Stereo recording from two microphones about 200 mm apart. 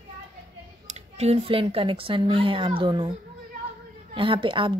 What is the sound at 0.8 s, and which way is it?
Speech, 35° right (ahead or behind).